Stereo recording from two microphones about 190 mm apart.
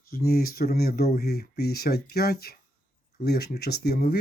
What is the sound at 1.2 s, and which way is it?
Speech, 55° left (ahead or behind).